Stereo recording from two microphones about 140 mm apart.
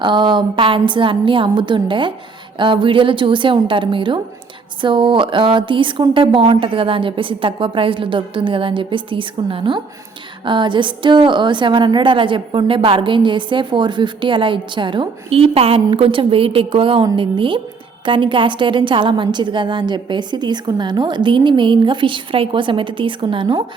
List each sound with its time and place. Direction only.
0.0 s a woman's voice: 35° right (ahead or behind)